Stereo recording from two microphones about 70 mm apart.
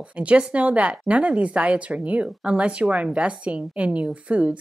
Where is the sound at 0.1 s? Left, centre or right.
Centre.